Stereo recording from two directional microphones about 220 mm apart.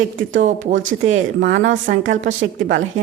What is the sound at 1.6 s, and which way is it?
Speech, 35° right (ahead or behind).